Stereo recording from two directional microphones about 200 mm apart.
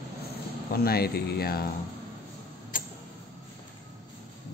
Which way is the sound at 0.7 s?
50° left (ahead or behind).